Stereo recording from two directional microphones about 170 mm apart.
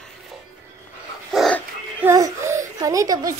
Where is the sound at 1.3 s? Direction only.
Centre (ahead or behind).